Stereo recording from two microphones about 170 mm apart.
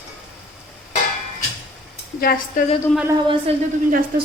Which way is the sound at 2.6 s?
50° left (ahead or behind).